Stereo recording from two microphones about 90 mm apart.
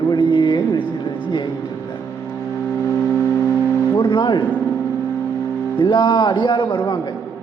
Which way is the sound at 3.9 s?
55° left (ahead or behind).